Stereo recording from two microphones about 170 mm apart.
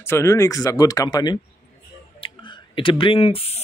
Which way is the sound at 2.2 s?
30° left (ahead or behind).